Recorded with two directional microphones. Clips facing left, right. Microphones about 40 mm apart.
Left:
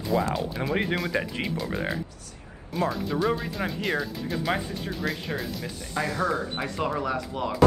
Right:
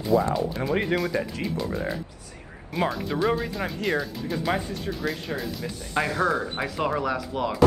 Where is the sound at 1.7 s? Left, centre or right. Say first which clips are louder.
Even; left.